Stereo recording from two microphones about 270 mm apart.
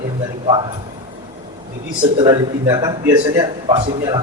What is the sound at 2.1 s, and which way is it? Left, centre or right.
A man's voice, centre.